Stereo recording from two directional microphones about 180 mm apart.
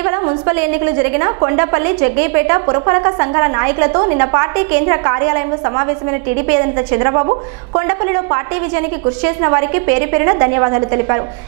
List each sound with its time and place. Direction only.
0.0 s a woman's voice: 15° right (ahead or behind)